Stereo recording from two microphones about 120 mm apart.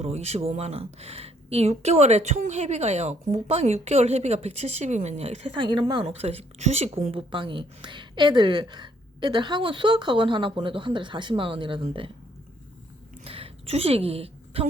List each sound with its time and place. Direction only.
0.0 s a woman's voice: 60° right (ahead or behind)
5.5 s a woman's voice: 40° right (ahead or behind)
6.1 s a woman's voice: 55° right (ahead or behind)
13.2 s a woman's voice: 55° right (ahead or behind)